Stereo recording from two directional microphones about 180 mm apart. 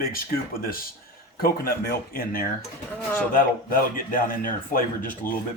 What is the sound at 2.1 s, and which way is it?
Speech, 55° left (ahead or behind).